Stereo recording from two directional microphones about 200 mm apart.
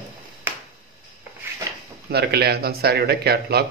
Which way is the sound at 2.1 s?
55° right (ahead or behind).